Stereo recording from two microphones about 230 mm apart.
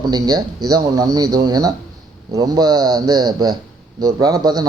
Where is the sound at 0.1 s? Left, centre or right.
Centre.